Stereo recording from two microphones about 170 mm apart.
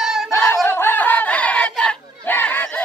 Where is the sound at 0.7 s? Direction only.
10° left (ahead or behind).